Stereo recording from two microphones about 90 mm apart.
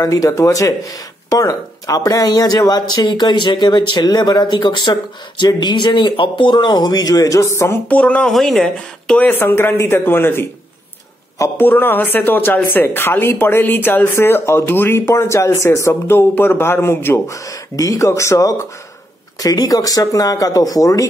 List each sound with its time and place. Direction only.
0.0 s speech: 40° left (ahead or behind)
7.9 s speech: 15° left (ahead or behind)
8.3 s speech: 5° left (ahead or behind)
9.2 s speech: 25° left (ahead or behind)
19.4 s speech: 45° left (ahead or behind)